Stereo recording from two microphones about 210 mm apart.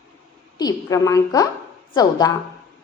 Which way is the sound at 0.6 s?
15° left (ahead or behind).